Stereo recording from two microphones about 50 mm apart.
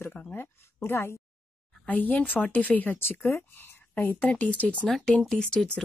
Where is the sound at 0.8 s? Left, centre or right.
Left.